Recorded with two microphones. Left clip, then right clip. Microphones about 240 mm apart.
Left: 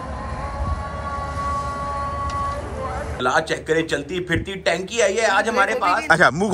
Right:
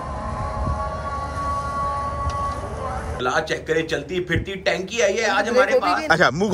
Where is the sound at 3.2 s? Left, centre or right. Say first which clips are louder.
Left 2 dB; centre.